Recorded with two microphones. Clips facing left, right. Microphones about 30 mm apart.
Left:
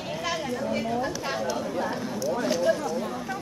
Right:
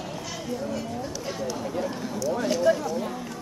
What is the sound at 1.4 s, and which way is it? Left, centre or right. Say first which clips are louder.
Speech: right 1 dB; centre.